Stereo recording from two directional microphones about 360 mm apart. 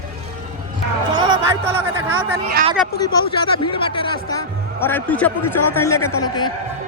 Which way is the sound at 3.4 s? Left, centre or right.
Centre.